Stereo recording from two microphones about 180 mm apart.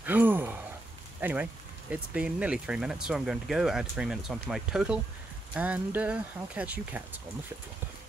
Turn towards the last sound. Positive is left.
turn(degrees=-10)  # may be behind; listen again after turning